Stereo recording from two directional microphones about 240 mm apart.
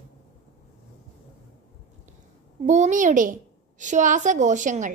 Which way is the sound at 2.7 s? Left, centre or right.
Right.